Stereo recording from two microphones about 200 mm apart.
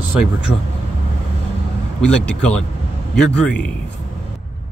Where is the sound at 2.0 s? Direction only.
5° left (ahead or behind).